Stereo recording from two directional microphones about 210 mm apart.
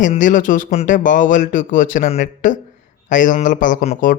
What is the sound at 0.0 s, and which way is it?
Speech, 40° left (ahead or behind).